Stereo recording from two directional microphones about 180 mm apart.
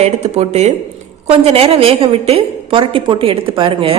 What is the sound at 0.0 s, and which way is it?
A woman's voice, 35° right (ahead or behind).